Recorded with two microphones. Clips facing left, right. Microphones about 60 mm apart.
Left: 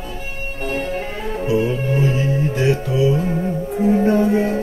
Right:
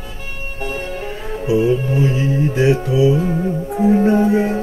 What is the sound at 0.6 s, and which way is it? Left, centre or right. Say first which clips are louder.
Music: left 2 dB; left.